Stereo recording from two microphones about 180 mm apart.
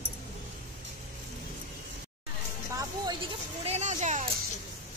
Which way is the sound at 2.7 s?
20° right (ahead or behind).